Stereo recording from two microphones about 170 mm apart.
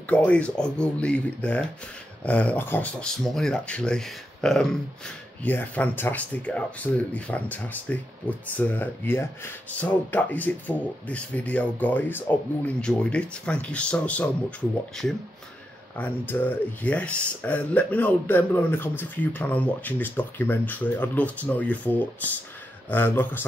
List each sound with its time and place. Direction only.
0.0 s speech: 10° left (ahead or behind)
16.0 s speech: 10° left (ahead or behind)